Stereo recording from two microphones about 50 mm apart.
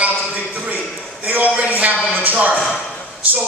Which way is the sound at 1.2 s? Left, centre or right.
Right.